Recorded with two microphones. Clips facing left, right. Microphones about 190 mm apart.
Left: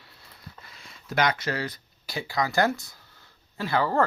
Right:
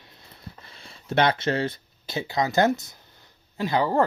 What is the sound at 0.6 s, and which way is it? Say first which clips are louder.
Speech: right 2 dB; 30° right (ahead or behind).